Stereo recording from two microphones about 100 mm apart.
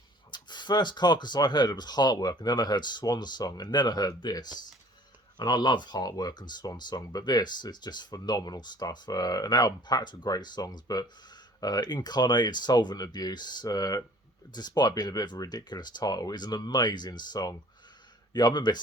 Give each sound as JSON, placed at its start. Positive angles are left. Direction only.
{"t": 0.3, "sound": "speech", "side_deg": 50}